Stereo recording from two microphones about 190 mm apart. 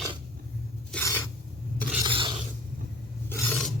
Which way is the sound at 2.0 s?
25° right (ahead or behind).